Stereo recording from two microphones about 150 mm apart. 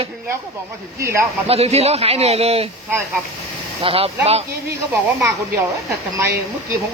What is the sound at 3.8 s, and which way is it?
Speech, 40° right (ahead or behind).